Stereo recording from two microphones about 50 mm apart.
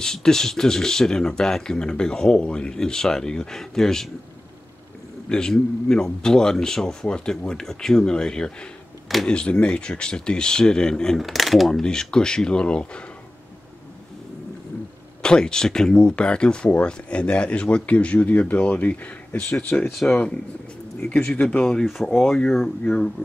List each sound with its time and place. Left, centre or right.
0.0 s speech: centre
5.3 s speech: centre
11.1 s speech: centre
11.8 s speech: centre
15.2 s speech: centre
19.5 s speech: centre
21.5 s speech: centre
21.8 s speech: centre
22.1 s speech: centre